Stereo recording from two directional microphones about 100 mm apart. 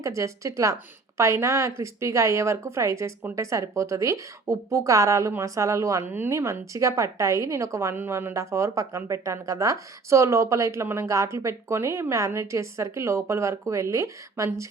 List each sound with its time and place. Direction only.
0.0 s a woman's voice: 30° right (ahead or behind)